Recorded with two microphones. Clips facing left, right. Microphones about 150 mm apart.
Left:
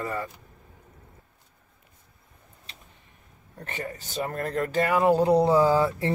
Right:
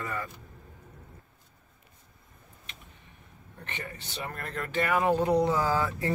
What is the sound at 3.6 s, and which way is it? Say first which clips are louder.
Speech: left 6 dB; 40° left (ahead or behind).